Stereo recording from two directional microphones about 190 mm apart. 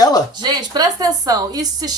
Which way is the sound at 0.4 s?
20° right (ahead or behind).